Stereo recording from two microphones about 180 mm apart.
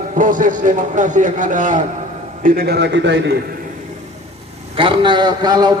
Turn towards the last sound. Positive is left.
turn(degrees=-25)  # may be behind; listen again after turning